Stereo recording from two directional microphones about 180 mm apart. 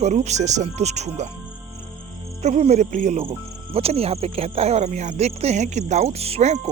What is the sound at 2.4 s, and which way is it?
Speech, 40° right (ahead or behind).